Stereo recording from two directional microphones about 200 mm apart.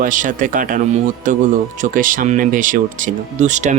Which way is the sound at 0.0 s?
40° right (ahead or behind).